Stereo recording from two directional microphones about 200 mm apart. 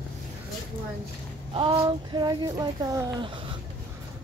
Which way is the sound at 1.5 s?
25° right (ahead or behind).